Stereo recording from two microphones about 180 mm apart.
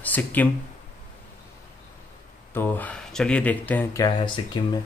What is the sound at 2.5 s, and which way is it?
Speech, 10° left (ahead or behind).